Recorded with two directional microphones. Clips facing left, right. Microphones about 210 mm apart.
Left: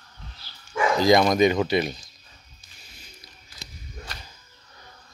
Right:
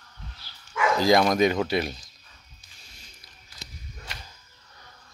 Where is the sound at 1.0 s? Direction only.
5° right (ahead or behind).